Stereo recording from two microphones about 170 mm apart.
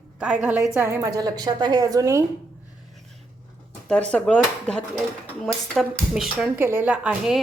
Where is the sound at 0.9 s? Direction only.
20° right (ahead or behind).